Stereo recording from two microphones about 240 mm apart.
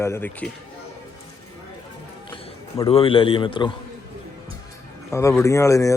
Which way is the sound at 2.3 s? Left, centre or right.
Centre.